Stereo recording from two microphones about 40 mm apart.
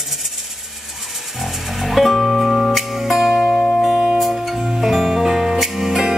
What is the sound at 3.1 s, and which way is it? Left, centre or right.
Music, centre.